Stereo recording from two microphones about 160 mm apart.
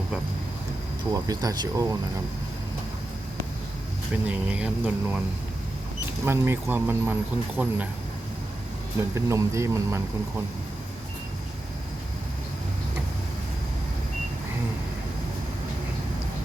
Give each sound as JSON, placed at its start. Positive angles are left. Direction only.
{"t": 1.1, "sound": "speech", "side_deg": -25}
{"t": 4.3, "sound": "speech", "side_deg": -5}
{"t": 6.2, "sound": "speech", "side_deg": -15}
{"t": 9.0, "sound": "speech", "side_deg": -20}